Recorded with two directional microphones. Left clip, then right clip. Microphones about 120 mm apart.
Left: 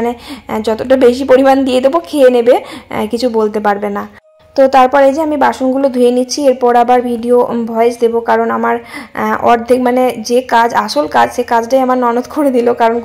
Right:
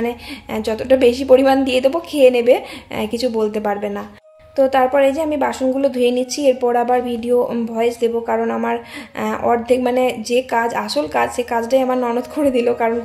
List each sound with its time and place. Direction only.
0.0 s a woman's voice: 35° left (ahead or behind)